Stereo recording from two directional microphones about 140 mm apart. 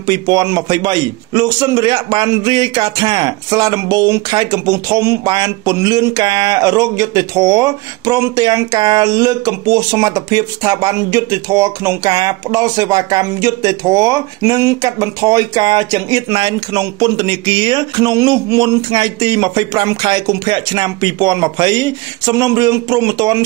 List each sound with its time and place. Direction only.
0.0 s speech: 25° right (ahead or behind)